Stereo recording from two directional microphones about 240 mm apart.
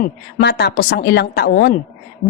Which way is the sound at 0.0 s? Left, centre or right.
Left.